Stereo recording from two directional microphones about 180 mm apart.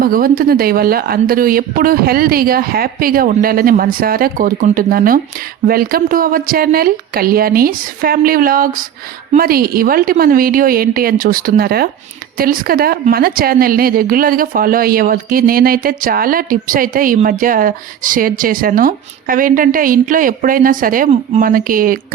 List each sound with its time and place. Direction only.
0.0 s a woman's voice: 55° right (ahead or behind)